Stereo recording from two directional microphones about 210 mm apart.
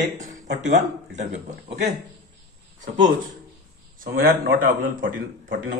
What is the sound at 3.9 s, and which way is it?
Speech, 45° right (ahead or behind).